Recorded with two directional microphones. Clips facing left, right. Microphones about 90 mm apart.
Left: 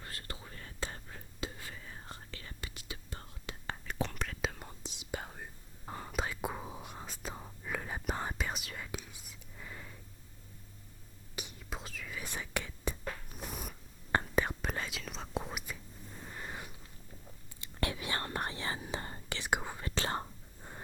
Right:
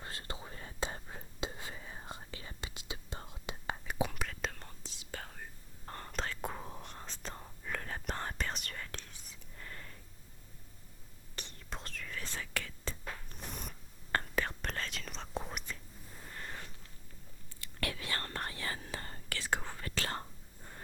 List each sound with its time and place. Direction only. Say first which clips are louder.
0.0 s whispering: right 2 dB; 25° right (ahead or behind)
4.1 s whispering: left 2 dB; centre (ahead or behind)
11.3 s whispering: left 2 dB; 10° left (ahead or behind)
14.1 s whispering: left 3 dB; 15° left (ahead or behind)